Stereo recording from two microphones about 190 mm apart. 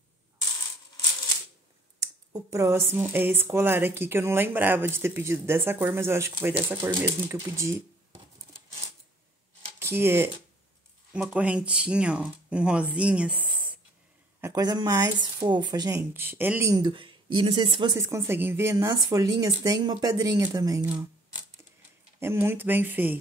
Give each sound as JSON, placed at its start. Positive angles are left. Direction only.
{"t": 2.3, "sound": "a woman's voice", "side_deg": -15}
{"t": 9.8, "sound": "speech", "side_deg": -10}
{"t": 14.4, "sound": "speech", "side_deg": -20}
{"t": 22.2, "sound": "a woman's voice", "side_deg": -10}